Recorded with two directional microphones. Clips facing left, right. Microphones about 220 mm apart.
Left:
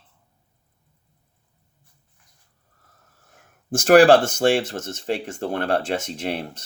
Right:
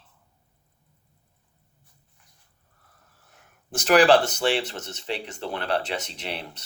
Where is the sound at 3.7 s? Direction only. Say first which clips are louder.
Left 5 dB; 45° left (ahead or behind).